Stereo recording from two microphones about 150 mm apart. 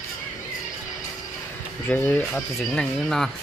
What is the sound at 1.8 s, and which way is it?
Speech, 10° left (ahead or behind).